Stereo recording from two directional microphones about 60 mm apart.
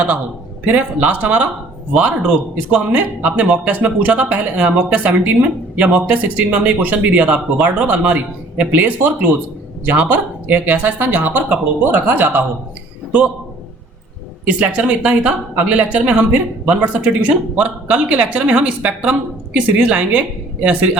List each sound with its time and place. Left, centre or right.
0.6 s a man's voice: right
13.1 s a man's voice: right
14.4 s a man's voice: right